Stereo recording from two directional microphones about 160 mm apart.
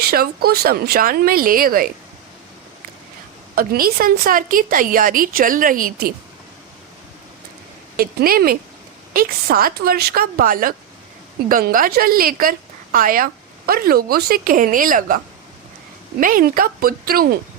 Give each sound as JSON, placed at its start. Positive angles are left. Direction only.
{"t": 0.0, "sound": "speech", "side_deg": -75}
{"t": 3.5, "sound": "a woman's voice", "side_deg": -65}
{"t": 7.9, "sound": "a woman's voice", "side_deg": -65}